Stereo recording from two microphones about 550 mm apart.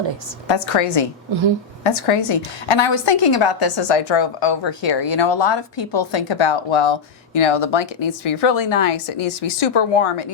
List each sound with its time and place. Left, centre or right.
0.4 s a woman's voice: left
1.3 s a woman's voice: right
1.8 s a woman's voice: left